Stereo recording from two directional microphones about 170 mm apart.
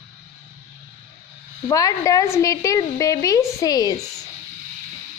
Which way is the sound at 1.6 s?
20° left (ahead or behind).